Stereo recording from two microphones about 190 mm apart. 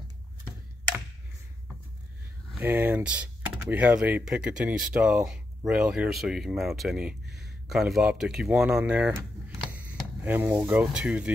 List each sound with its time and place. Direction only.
2.6 s speech: 10° right (ahead or behind)